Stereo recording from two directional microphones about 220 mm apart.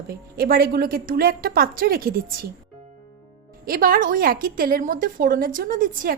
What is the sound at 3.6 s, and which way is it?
A woman's voice, 40° right (ahead or behind).